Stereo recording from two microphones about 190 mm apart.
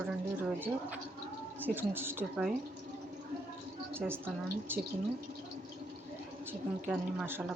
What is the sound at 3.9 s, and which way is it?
Speech, 10° right (ahead or behind).